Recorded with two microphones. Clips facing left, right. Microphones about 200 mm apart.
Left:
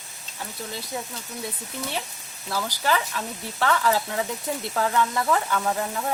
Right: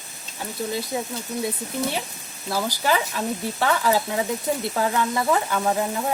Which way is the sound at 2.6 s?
15° right (ahead or behind).